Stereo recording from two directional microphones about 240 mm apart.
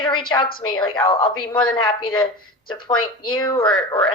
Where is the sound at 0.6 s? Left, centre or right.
Centre.